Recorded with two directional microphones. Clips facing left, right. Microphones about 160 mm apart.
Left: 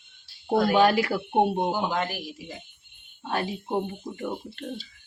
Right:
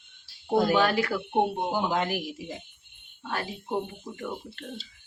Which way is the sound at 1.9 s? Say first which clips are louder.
Right 1 dB; 15° right (ahead or behind).